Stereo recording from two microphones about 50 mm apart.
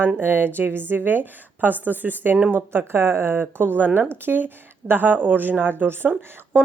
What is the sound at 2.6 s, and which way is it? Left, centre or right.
Speech, right.